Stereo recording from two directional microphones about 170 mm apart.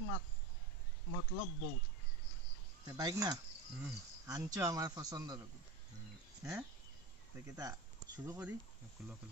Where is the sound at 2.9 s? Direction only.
20° right (ahead or behind).